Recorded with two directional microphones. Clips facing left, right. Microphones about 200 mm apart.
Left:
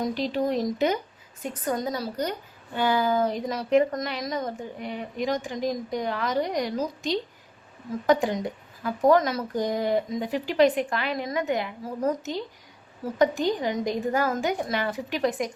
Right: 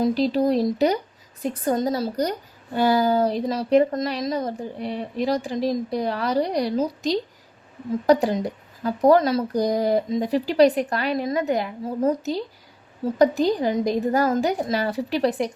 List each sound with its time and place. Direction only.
0.0 s speech: 35° right (ahead or behind)